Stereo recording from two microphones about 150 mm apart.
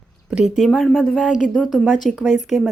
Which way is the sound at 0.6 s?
Centre (ahead or behind).